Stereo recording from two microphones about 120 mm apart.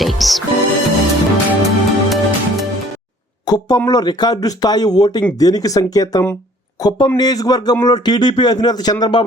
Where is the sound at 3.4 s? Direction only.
35° left (ahead or behind).